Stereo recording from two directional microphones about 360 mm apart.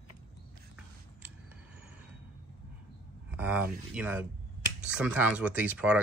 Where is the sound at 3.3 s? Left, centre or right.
Centre.